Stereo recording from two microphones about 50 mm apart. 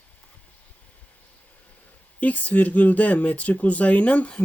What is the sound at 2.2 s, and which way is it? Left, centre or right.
Speech, left.